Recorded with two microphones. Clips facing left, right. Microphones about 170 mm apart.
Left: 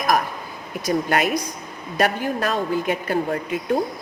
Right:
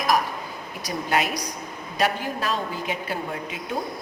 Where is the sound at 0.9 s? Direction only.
50° left (ahead or behind).